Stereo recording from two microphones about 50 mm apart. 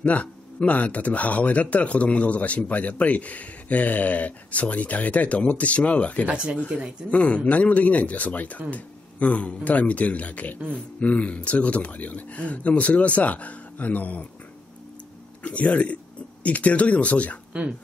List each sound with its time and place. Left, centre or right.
0.0 s speech: left
6.3 s speech: centre
7.1 s speech: left
15.4 s speech: left